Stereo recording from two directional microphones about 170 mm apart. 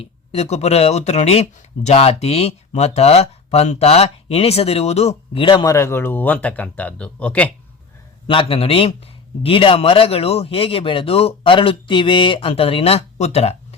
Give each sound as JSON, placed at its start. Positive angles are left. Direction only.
{"t": 0.0, "sound": "speech", "side_deg": 35}
{"t": 8.3, "sound": "speech", "side_deg": 30}